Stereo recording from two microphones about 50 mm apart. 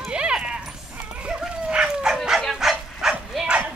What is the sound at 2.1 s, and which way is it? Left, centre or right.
Bow-wow, centre.